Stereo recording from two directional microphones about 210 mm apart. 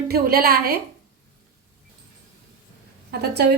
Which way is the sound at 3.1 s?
50° right (ahead or behind).